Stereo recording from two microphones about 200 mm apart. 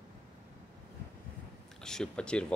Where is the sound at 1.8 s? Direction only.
5° left (ahead or behind).